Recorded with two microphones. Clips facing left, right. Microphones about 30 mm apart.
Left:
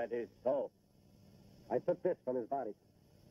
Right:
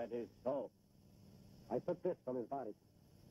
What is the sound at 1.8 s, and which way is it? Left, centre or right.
Speech, centre.